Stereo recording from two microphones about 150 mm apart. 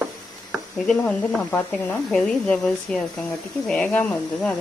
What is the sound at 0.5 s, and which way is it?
Speech, 5° left (ahead or behind).